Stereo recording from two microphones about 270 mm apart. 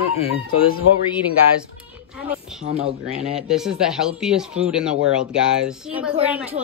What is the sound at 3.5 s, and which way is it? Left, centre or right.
Speech, centre.